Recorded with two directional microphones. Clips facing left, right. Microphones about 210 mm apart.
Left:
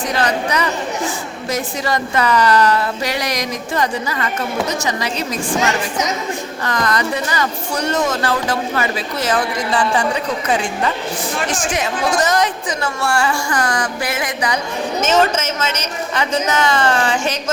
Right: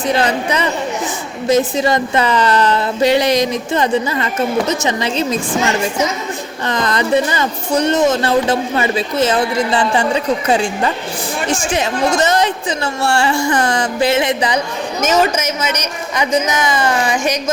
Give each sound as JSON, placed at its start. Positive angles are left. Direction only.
{"t": 0.1, "sound": "a woman's voice", "side_deg": -25}
{"t": 6.7, "sound": "a woman's voice", "side_deg": -25}
{"t": 15.0, "sound": "a woman's voice", "side_deg": -10}